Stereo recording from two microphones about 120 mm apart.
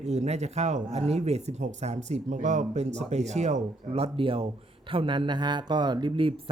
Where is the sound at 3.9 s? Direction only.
50° right (ahead or behind).